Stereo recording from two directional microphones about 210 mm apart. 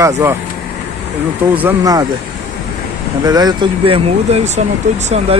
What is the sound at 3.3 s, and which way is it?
Speech, 20° right (ahead or behind).